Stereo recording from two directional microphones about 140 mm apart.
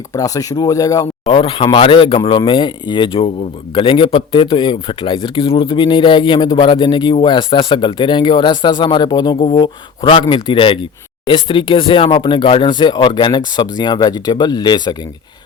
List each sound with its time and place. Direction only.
0.1 s speech: 25° left (ahead or behind)
1.3 s speech: 40° left (ahead or behind)